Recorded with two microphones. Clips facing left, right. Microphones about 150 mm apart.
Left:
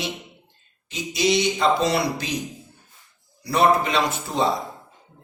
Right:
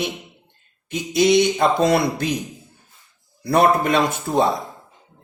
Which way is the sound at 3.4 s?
55° right (ahead or behind).